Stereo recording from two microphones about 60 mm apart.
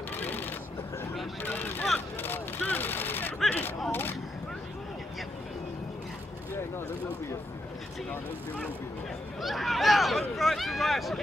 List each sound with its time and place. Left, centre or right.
0.1 s shuffling cards: left
1.4 s vehicle: left
2.2 s a sound: left
3.4 s speech: left
9.4 s speech: centre